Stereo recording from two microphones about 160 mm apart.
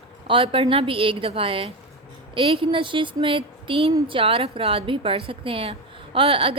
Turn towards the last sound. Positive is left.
turn(degrees=-35)  # may be behind; listen again after turning